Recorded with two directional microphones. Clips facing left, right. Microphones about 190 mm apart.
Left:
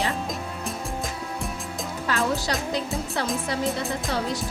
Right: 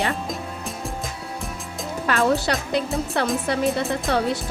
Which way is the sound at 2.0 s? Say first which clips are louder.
Right 5 dB; 60° right (ahead or behind).